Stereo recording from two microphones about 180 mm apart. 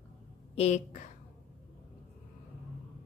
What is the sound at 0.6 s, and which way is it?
Speech, 40° left (ahead or behind).